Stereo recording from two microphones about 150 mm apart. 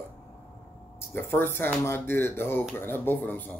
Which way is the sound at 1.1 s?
15° left (ahead or behind).